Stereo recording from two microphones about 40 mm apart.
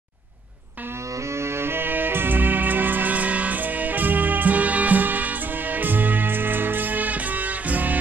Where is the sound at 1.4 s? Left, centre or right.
Right.